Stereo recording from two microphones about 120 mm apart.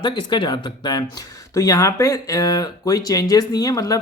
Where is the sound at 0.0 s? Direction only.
40° left (ahead or behind).